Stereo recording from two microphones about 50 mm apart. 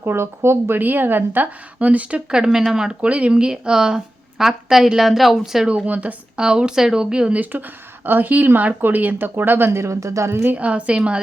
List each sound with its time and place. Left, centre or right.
0.0 s speech: right
0.8 s a woman's voice: right; by 2.9 s centre
3.0 s a woman's voice: right; by 5.6 s centre
5.6 s a woman's voice: right
6.3 s a woman's voice: centre
8.0 s a woman's voice: right
9.8 s a woman's voice: right
10.5 s a woman's voice: right